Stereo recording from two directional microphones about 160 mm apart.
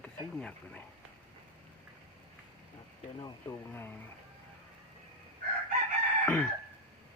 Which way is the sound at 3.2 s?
15° left (ahead or behind).